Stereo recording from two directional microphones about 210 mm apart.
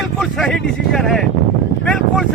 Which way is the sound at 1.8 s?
Centre (ahead or behind).